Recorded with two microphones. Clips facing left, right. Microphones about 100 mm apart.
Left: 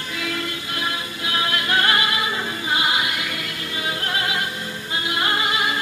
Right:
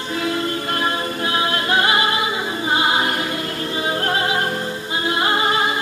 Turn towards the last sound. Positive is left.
turn(degrees=-30)  # may be behind; listen again after turning